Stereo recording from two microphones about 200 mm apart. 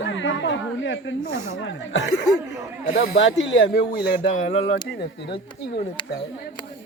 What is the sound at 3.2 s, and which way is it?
Speech, 75° left (ahead or behind).